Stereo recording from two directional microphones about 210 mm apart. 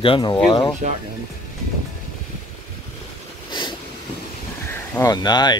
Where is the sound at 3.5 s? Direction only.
20° left (ahead or behind).